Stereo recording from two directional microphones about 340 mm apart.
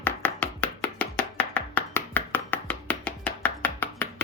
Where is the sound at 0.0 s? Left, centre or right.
Centre.